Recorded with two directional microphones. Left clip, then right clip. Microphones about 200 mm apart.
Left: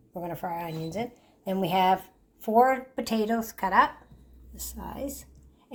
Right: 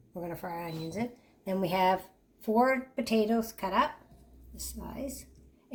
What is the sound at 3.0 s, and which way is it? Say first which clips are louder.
Speech: even; 35° left (ahead or behind).